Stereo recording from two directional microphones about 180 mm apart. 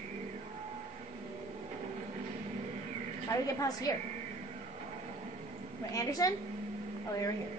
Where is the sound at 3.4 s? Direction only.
20° left (ahead or behind).